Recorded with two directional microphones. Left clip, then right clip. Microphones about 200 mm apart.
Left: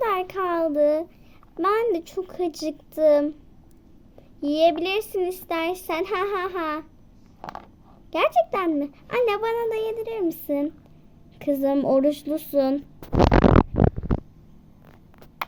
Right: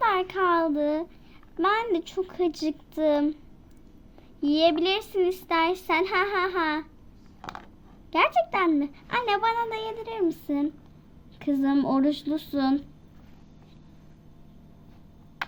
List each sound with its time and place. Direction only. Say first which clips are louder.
0.0 s a sound: right 1 dB; 45° left (ahead or behind)
1.5 s a child's voice: left 2 dB; 50° left (ahead or behind)
4.4 s a child's voice: left 2 dB; 45° left (ahead or behind)
8.1 s a child's voice: left 2 dB; 45° left (ahead or behind)